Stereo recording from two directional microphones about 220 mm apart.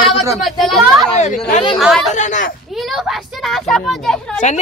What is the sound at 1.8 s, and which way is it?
Speech, centre (ahead or behind).